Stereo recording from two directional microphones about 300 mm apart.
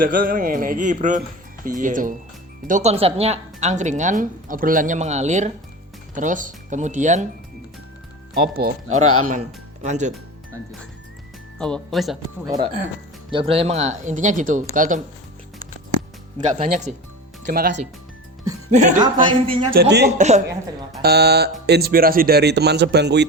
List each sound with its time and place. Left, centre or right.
0.0 s a woman's voice: right
8.4 s speech: right
8.9 s speech: right
9.3 s speech: right
11.5 s speech: centre
12.5 s a man's voice: centre
17.4 s a woman's voice: right
19.7 s speech: right